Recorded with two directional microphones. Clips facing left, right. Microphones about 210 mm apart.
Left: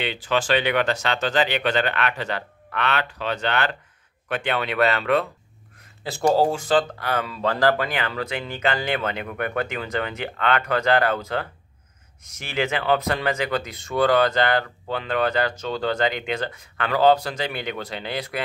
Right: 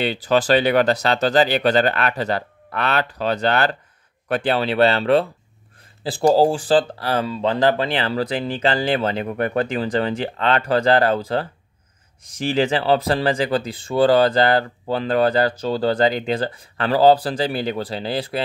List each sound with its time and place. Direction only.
0.0 s speech: 40° right (ahead or behind)